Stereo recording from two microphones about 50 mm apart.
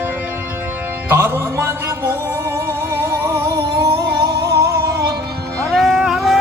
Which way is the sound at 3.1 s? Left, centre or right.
Right.